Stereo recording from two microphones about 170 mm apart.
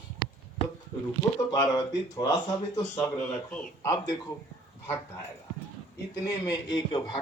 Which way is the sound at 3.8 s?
20° left (ahead or behind).